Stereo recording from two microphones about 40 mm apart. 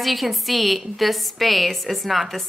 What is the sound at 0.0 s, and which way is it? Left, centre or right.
A woman's voice, centre.